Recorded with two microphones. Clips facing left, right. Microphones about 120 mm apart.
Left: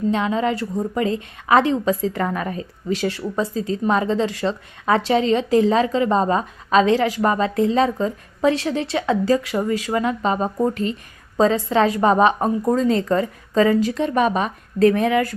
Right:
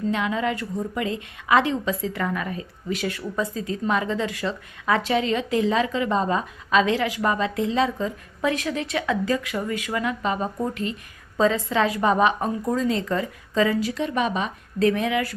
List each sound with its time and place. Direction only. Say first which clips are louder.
0.1 s a woman's voice: left 3 dB; 30° left (ahead or behind)